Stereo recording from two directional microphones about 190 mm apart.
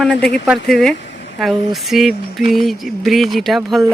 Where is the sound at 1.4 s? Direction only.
Centre (ahead or behind).